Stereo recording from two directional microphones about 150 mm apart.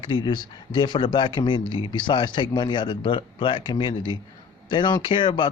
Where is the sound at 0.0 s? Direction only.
35° left (ahead or behind).